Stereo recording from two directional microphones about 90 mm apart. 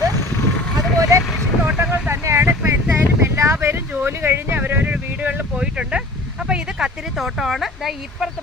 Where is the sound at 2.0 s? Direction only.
30° right (ahead or behind).